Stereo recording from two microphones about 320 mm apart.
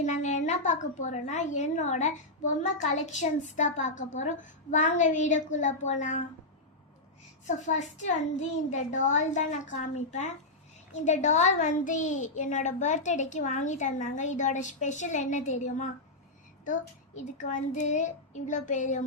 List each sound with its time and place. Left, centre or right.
0.0 s a woman's voice: left
7.4 s a woman's voice: left